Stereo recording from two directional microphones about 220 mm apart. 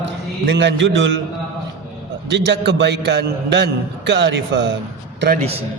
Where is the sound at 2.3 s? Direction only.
50° right (ahead or behind).